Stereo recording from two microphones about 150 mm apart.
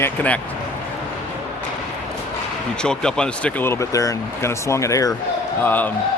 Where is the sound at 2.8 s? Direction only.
5° left (ahead or behind).